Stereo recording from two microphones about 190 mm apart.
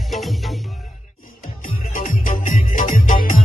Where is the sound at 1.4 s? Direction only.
45° left (ahead or behind).